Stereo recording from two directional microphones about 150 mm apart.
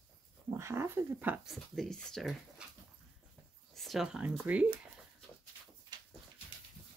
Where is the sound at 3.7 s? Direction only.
Centre (ahead or behind).